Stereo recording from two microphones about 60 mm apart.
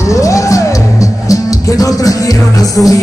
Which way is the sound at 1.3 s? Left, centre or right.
Left.